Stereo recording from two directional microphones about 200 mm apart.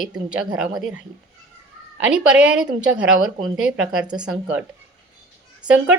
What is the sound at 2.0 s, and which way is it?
A woman's voice, 5° right (ahead or behind).